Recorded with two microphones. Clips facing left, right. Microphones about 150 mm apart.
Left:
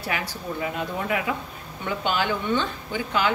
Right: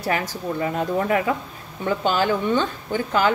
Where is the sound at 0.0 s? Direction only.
45° right (ahead or behind).